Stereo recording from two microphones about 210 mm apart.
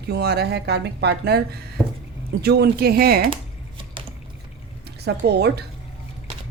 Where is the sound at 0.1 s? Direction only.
50° right (ahead or behind).